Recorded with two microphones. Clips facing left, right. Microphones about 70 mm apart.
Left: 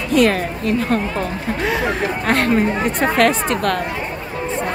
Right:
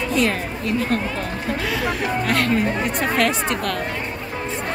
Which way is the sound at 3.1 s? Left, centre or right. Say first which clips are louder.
Left 4 dB; left.